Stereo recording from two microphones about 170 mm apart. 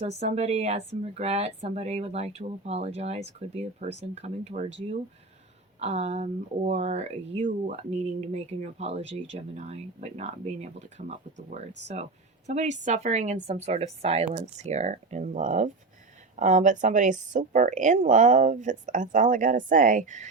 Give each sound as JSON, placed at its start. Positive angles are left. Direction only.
{"t": 0.2, "sound": "speech", "side_deg": -40}
{"t": 5.8, "sound": "speech", "side_deg": -40}